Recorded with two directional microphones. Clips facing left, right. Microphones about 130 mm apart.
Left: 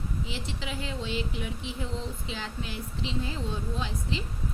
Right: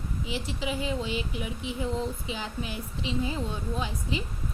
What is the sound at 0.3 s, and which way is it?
Speech, 5° right (ahead or behind).